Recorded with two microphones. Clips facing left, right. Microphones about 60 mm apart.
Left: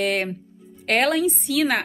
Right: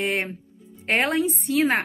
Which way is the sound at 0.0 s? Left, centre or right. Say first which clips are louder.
Left 2 dB; right.